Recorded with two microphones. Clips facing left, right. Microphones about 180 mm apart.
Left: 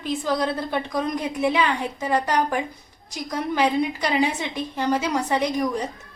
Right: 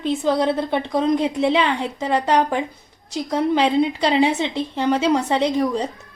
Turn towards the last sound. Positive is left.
turn(degrees=-30)  # may be behind; listen again after turning